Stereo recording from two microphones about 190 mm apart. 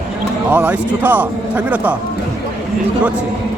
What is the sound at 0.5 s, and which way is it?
A man's voice, 10° right (ahead or behind).